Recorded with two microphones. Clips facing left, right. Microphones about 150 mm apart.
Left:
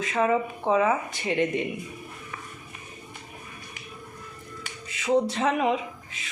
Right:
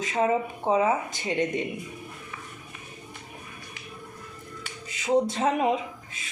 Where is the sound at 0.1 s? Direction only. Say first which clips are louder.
Left 1 dB; 30° right (ahead or behind).